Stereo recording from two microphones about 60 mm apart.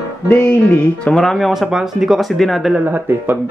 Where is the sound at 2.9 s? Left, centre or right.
Right.